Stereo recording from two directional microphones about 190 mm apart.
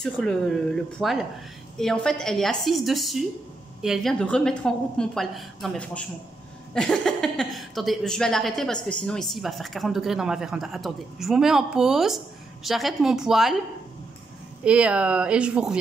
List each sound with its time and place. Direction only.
0.0 s a woman's voice: 5° left (ahead or behind)
14.6 s a woman's voice: 5° right (ahead or behind)